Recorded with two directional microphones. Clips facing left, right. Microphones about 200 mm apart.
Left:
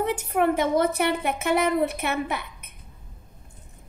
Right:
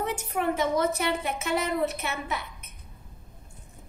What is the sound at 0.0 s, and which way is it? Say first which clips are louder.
A woman's voice: left 5 dB; 55° left (ahead or behind).